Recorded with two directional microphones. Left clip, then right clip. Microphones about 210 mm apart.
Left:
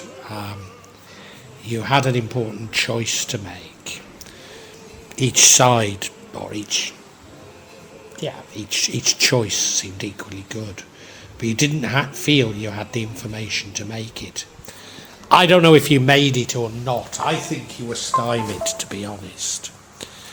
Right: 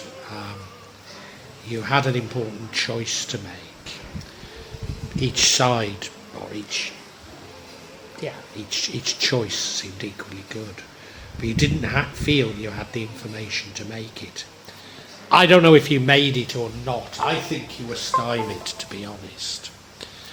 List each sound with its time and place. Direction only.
0.3 s music: 25° left (ahead or behind)
1.6 s a man's voice: 25° left (ahead or behind)
5.1 s a man's voice: 30° left (ahead or behind)
8.2 s a man's voice: 30° left (ahead or behind)